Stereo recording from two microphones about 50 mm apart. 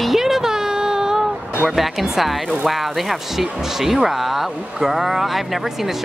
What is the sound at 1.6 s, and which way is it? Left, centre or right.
Speech, centre.